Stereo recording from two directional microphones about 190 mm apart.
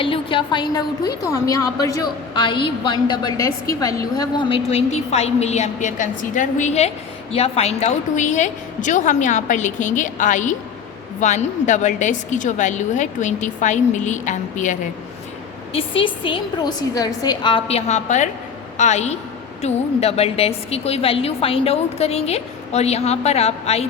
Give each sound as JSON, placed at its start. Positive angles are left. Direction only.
{"t": 0.0, "sound": "a woman's voice", "side_deg": 25}
{"t": 15.7, "sound": "a woman's voice", "side_deg": 30}